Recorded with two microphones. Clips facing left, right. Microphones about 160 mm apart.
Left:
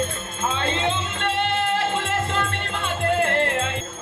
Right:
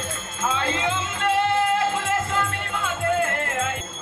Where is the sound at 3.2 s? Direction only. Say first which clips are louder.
Left 4 dB; 75° left (ahead or behind).